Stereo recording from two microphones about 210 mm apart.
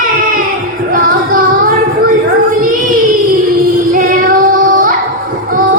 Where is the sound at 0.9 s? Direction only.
40° right (ahead or behind).